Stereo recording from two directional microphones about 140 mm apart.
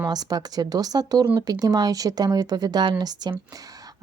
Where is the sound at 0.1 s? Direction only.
30° right (ahead or behind).